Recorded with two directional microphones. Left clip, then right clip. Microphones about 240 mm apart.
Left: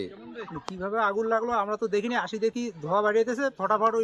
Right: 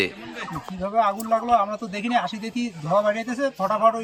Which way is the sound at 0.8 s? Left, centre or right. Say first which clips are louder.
Right 4 dB; centre.